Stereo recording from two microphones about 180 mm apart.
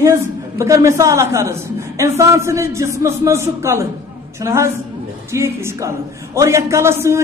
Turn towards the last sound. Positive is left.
turn(degrees=-15)  # may be behind; listen again after turning